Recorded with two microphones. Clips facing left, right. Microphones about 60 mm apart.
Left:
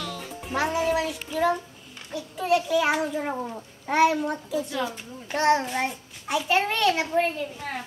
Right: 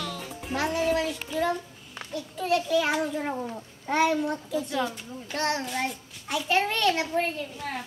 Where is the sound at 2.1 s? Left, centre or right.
Centre.